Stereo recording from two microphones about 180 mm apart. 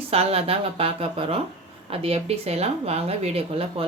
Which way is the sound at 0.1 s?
35° right (ahead or behind).